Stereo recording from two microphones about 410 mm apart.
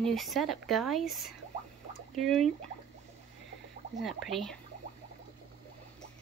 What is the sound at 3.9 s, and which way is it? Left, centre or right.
Speech, centre.